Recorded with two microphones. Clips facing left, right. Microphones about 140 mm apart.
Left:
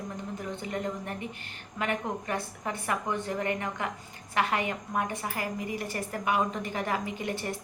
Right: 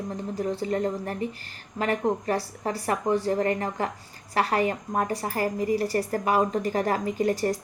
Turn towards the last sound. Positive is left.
turn(degrees=-40)  # may be behind; listen again after turning